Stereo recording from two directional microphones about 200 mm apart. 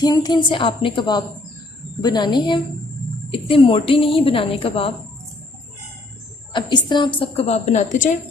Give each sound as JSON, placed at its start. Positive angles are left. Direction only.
{"t": 0.0, "sound": "a woman's voice", "side_deg": 20}
{"t": 6.5, "sound": "a woman's voice", "side_deg": 20}